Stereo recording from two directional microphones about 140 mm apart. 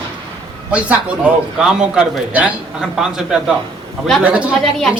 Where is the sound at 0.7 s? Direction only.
10° right (ahead or behind).